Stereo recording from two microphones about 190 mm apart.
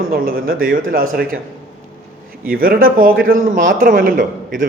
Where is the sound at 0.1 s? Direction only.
50° right (ahead or behind).